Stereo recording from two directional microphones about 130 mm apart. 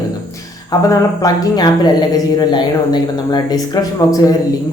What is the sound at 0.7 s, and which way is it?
Speech, 30° left (ahead or behind).